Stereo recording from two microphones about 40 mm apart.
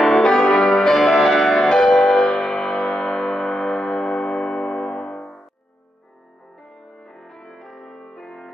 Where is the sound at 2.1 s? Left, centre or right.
Centre.